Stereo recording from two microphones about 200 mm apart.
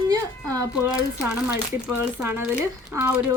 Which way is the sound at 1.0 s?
15° left (ahead or behind).